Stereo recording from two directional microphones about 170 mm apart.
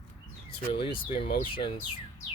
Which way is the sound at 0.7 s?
30° left (ahead or behind).